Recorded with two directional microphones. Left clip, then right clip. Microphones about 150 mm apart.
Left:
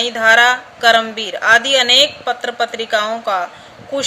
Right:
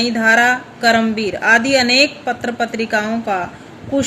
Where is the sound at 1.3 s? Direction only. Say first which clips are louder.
Left 1 dB; 35° left (ahead or behind).